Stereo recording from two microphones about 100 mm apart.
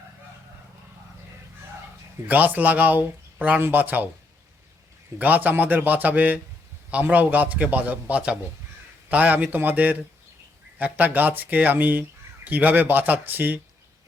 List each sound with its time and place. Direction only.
2.2 s speech: 15° right (ahead or behind)
5.2 s speech: 15° right (ahead or behind)